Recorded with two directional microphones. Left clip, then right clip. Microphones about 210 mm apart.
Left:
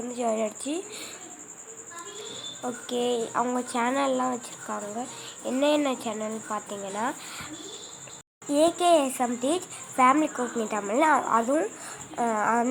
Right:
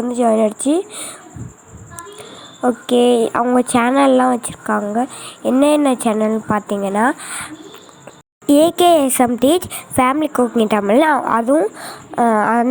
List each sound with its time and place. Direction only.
0.1 s speech: 25° right (ahead or behind)
2.6 s a woman's voice: 30° right (ahead or behind)